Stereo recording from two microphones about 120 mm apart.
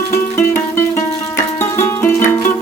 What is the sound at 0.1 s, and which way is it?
Music, 20° left (ahead or behind).